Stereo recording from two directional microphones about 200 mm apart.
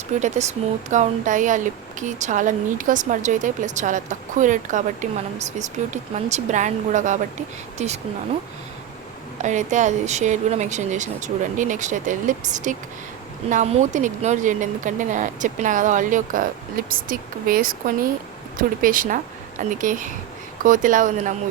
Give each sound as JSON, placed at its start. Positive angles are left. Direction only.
{"t": 0.2, "sound": "speech", "side_deg": -35}
{"t": 9.4, "sound": "a woman's voice", "side_deg": -35}